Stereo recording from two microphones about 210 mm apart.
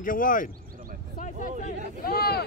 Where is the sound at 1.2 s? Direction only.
35° left (ahead or behind).